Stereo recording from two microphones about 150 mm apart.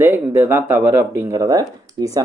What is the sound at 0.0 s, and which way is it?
A man's voice, 15° right (ahead or behind).